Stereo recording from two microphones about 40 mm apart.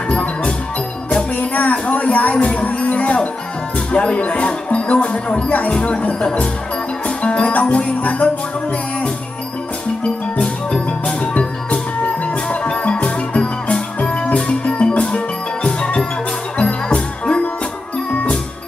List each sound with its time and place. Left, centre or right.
0.1 s music: left
1.3 s music: left
3.9 s speech: left
5.8 s music: left
7.2 s music: left
10.4 s music: centre
12.4 s music: left